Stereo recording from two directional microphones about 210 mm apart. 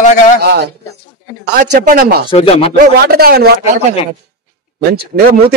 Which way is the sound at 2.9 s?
50° right (ahead or behind).